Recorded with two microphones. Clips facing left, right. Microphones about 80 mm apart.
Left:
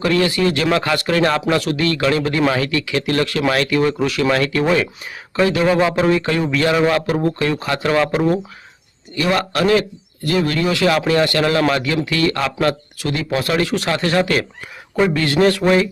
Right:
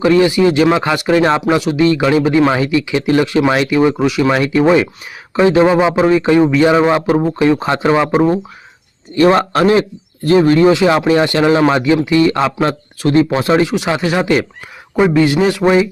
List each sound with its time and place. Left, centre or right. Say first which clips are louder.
0.0 s a man's voice: right 6 dB; centre
9.1 s a man's voice: right 8 dB; right; by 15.9 s centre